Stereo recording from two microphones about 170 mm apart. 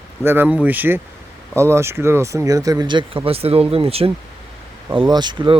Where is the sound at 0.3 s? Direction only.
10° right (ahead or behind).